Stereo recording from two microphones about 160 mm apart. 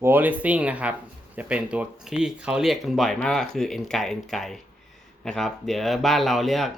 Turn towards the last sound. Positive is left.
turn(degrees=0)  # may be behind; listen again after turning